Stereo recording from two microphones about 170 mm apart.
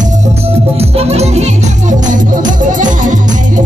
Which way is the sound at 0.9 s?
40° right (ahead or behind).